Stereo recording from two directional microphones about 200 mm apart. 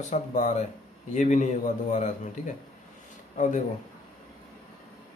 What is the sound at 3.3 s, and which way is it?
Speech, 35° left (ahead or behind).